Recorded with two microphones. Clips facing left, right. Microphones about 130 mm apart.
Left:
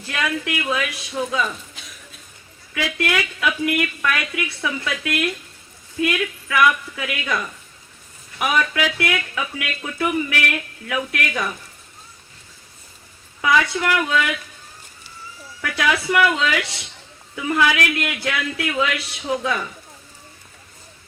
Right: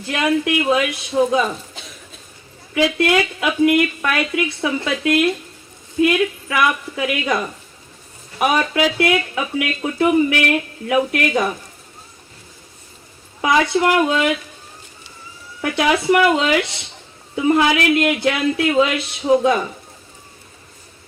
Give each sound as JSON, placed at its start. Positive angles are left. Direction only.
{"t": 0.0, "sound": "speech", "side_deg": -25}
{"t": 13.4, "sound": "speech", "side_deg": -30}
{"t": 15.6, "sound": "speech", "side_deg": -25}